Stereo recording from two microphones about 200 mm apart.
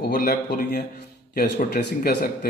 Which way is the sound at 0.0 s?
55° left (ahead or behind).